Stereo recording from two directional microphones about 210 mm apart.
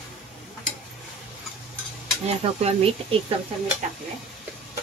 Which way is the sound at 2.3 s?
30° right (ahead or behind).